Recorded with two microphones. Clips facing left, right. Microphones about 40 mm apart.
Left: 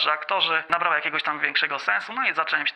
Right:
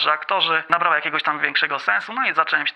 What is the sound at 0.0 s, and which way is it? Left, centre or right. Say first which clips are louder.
Speech: right 3 dB; centre.